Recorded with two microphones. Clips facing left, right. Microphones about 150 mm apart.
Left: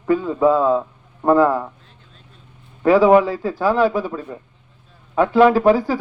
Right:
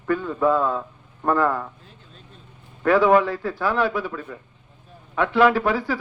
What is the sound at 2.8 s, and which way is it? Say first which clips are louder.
Speech: left 4 dB; 35° left (ahead or behind).